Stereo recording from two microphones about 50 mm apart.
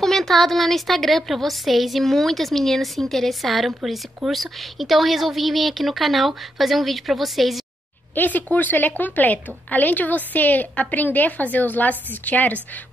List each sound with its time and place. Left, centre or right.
0.0 s a woman's voice: centre
8.1 s a woman's voice: left